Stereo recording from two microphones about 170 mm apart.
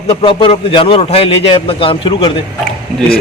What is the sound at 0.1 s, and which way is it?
A man's voice, 35° left (ahead or behind).